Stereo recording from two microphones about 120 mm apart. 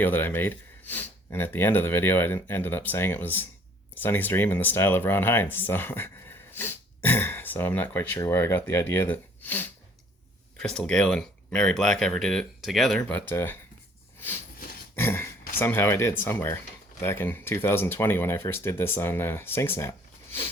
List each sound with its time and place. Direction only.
0.0 s speech: 15° left (ahead or behind)
14.2 s a sound: 15° left (ahead or behind)
14.9 s speech: 20° left (ahead or behind)